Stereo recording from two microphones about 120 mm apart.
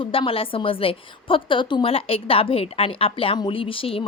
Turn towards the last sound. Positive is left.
turn(degrees=50)  # may be behind; listen again after turning